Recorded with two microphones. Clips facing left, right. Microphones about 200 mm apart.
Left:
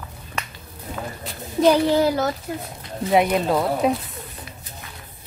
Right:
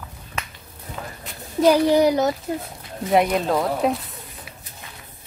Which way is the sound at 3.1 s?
Centre (ahead or behind).